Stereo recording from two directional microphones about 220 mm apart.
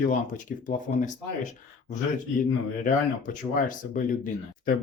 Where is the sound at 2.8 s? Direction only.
35° left (ahead or behind).